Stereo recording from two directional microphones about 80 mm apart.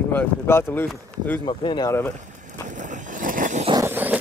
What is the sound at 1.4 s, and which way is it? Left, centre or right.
Speech, left.